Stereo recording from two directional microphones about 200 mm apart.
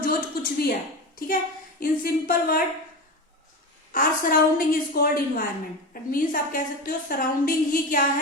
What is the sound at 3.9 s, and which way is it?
A woman's voice, 45° left (ahead or behind).